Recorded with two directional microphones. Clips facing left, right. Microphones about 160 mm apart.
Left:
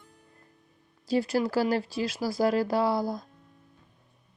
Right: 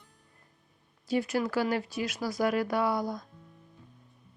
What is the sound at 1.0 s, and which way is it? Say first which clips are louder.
A woman's voice: left 3 dB; 35° left (ahead or behind).